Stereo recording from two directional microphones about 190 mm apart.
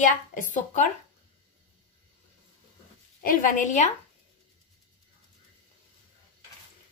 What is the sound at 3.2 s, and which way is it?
Speech, 45° left (ahead or behind).